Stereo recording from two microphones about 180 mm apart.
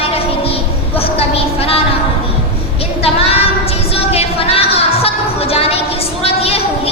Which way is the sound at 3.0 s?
30° left (ahead or behind).